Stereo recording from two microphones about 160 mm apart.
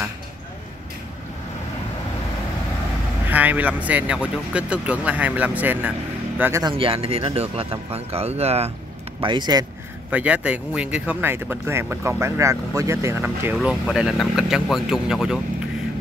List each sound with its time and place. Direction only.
3.3 s speech: 10° right (ahead or behind)
6.6 s speech: 35° right (ahead or behind)
9.2 s speech: 30° right (ahead or behind)
10.1 s speech: 10° right (ahead or behind)